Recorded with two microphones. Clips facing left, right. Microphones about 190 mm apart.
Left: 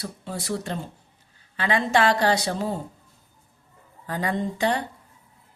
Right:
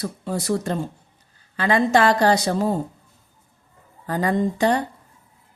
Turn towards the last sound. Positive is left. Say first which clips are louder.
# right 5 dB
turn(degrees=-45)  # may be behind; listen again after turning